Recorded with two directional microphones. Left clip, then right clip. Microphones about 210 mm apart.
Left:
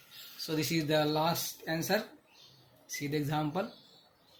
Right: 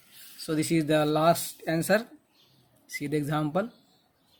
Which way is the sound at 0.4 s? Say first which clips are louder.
Right 6 dB; 30° right (ahead or behind).